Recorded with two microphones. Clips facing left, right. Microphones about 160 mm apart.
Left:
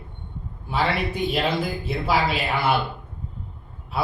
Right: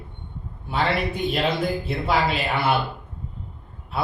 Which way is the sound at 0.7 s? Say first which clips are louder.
Even; centre (ahead or behind).